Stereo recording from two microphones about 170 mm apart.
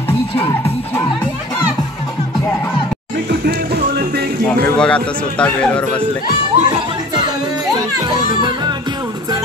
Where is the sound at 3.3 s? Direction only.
70° right (ahead or behind).